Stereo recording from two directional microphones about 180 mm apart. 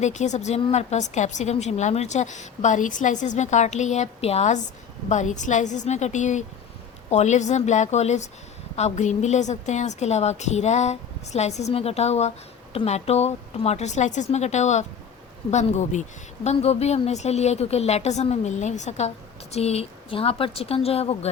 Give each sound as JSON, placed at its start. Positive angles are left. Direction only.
{"t": 0.0, "sound": "speech", "side_deg": 40}